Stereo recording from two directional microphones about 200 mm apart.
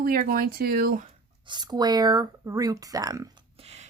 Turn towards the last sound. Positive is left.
turn(degrees=-30)  # may be behind; listen again after turning